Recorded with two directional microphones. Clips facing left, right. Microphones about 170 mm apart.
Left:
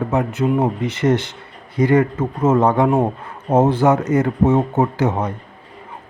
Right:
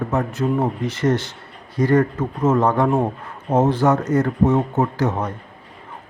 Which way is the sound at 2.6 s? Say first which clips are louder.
Left 2 dB; 15° left (ahead or behind).